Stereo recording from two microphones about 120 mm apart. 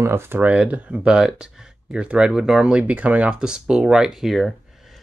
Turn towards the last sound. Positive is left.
turn(degrees=0)  # may be behind; listen again after turning